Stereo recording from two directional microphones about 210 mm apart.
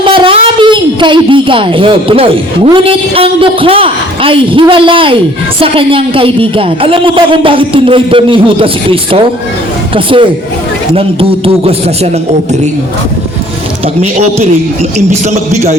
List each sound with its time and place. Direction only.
0.0 s speech: 25° right (ahead or behind)
13.8 s a man's voice: 30° right (ahead or behind)